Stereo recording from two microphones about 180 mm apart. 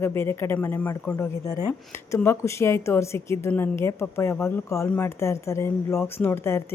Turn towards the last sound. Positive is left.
turn(degrees=15)  # may be behind; listen again after turning